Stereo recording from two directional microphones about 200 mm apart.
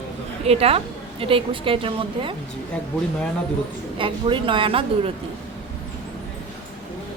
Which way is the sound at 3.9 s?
25° right (ahead or behind).